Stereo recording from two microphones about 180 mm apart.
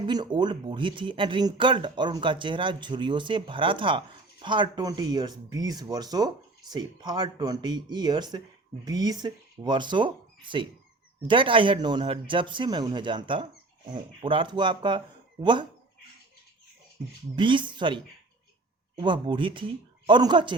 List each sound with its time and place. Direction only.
0.1 s speech: 25° right (ahead or behind)
17.3 s speech: 25° right (ahead or behind)